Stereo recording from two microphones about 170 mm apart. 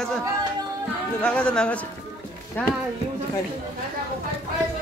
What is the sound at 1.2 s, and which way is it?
Speech, 5° left (ahead or behind).